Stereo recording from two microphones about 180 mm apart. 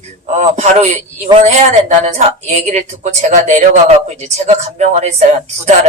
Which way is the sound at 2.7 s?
40° right (ahead or behind).